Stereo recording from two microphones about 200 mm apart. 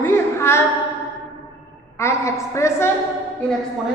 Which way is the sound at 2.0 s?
15° left (ahead or behind).